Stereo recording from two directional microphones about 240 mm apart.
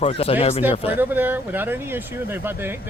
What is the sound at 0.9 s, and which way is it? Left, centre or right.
Speech, centre.